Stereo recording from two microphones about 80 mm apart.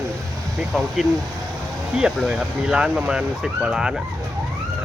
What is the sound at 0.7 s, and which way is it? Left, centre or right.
Speech, centre.